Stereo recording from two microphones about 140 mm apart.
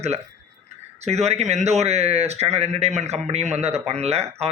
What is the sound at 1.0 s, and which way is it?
Speech, 50° right (ahead or behind).